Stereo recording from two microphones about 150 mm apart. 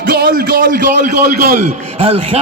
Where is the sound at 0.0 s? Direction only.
80° right.